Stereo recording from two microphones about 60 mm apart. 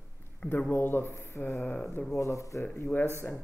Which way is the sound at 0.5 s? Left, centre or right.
Left.